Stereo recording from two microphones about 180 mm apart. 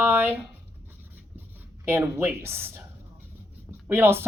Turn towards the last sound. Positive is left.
turn(degrees=-15)  # may be behind; listen again after turning